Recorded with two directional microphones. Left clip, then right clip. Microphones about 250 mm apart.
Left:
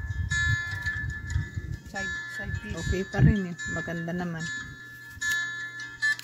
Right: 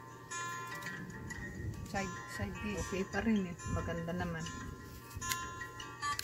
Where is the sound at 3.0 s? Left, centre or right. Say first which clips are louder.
Left 8 dB; left.